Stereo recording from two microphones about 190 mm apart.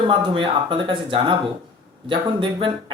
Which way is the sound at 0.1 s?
25° right (ahead or behind).